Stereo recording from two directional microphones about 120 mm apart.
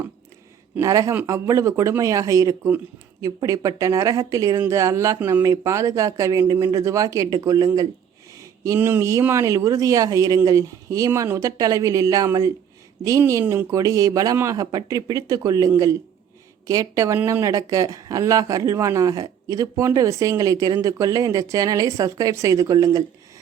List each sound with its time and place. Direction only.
0.8 s speech: 25° right (ahead or behind)